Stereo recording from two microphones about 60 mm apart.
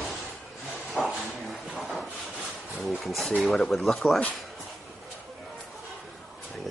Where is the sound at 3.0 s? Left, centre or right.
Centre.